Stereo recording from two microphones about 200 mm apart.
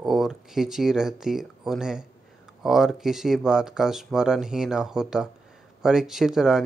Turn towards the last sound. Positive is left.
turn(degrees=0)  # may be behind; listen again after turning